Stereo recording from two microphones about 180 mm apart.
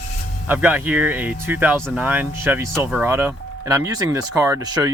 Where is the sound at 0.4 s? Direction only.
10° right (ahead or behind).